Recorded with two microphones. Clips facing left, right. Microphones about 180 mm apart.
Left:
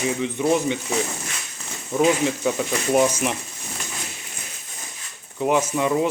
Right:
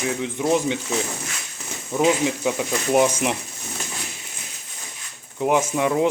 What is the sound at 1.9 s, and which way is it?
Speech, 5° right (ahead or behind).